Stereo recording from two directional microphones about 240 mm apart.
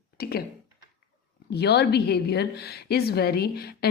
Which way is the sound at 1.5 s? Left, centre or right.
Left.